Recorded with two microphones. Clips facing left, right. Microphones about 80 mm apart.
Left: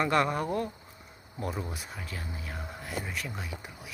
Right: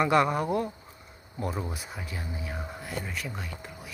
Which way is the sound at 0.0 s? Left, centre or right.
Centre.